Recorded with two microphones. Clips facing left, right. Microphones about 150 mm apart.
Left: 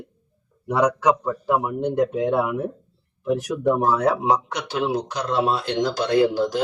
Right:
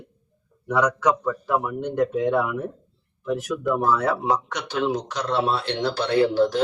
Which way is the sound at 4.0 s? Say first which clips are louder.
Left 3 dB; 15° left (ahead or behind).